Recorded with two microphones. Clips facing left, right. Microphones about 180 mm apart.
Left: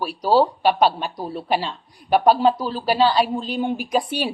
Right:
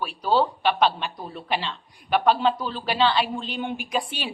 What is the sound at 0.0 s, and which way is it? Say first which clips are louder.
Speech: left 5 dB; 40° left (ahead or behind).